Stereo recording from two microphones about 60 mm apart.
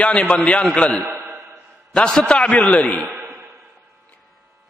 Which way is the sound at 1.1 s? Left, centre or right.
Right.